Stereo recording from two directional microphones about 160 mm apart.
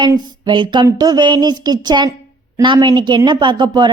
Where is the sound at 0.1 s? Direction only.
30° right (ahead or behind).